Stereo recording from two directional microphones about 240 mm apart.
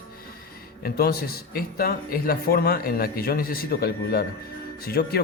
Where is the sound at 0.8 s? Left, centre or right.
Left.